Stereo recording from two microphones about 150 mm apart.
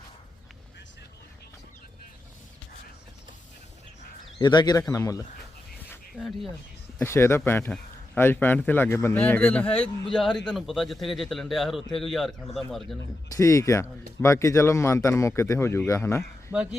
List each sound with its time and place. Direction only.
4.4 s a man's voice: 30° left (ahead or behind)
6.1 s a man's voice: centre (ahead or behind)
7.0 s a man's voice: 15° left (ahead or behind); by 12.3 s centre (ahead or behind)
13.3 s speech: 20° left (ahead or behind)
16.5 s a man's voice: 5° right (ahead or behind)